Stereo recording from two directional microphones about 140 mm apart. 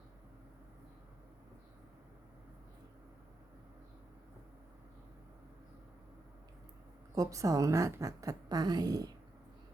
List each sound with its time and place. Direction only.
7.2 s a woman's voice: 25° right (ahead or behind)